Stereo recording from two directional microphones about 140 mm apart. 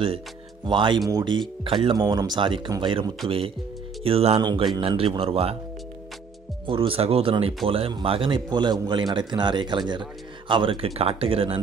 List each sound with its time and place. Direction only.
0.7 s speech: 35° right (ahead or behind)
4.4 s speech: 30° right (ahead or behind)
4.7 s speech: 40° right (ahead or behind)
6.6 s speech: 40° right (ahead or behind)